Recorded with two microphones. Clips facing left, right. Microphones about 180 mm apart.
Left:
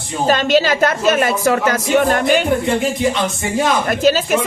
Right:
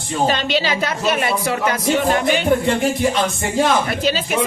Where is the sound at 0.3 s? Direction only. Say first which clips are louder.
Left 9 dB; 45° left (ahead or behind).